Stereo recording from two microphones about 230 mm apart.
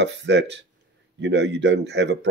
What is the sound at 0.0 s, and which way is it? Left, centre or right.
Speech, right.